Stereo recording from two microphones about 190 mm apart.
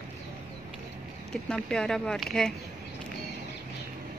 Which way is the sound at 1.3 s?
5° left (ahead or behind).